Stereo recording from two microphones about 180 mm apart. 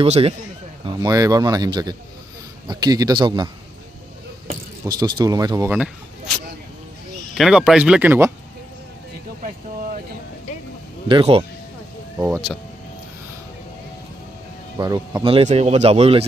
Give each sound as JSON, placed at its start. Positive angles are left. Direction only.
{"t": 0.0, "sound": "speech", "side_deg": -35}
{"t": 0.8, "sound": "speech", "side_deg": -20}
{"t": 4.8, "sound": "speech", "side_deg": -25}
{"t": 5.7, "sound": "speech", "side_deg": -5}
{"t": 7.3, "sound": "speech", "side_deg": 0}
{"t": 11.1, "sound": "speech", "side_deg": -30}
{"t": 12.3, "sound": "speech", "side_deg": -5}
{"t": 14.8, "sound": "speech", "side_deg": -20}
{"t": 15.4, "sound": "speech", "side_deg": -40}